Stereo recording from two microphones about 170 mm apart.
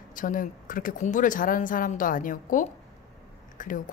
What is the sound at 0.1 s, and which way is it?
Speech, 55° left (ahead or behind).